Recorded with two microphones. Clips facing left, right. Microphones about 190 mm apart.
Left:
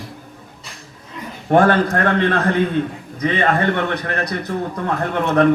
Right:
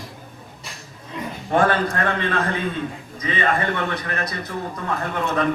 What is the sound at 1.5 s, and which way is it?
A man's voice, 60° left (ahead or behind).